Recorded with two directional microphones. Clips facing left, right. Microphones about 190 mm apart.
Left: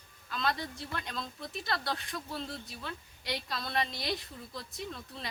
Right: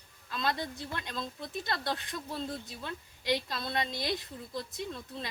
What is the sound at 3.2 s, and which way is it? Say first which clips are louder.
Speech: right 5 dB; 20° right (ahead or behind).